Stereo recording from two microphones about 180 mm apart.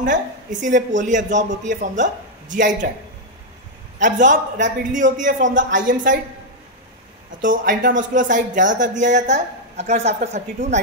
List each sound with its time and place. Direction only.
0.0 s speech: 45° right (ahead or behind)
4.0 s speech: 45° right (ahead or behind)
7.4 s speech: 45° right (ahead or behind)